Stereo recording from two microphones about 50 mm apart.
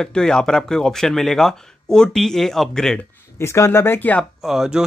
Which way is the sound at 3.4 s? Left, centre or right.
Left.